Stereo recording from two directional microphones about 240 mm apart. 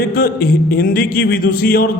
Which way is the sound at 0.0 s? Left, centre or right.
Left.